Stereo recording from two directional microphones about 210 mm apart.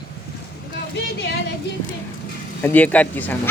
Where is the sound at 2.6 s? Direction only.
5° left (ahead or behind).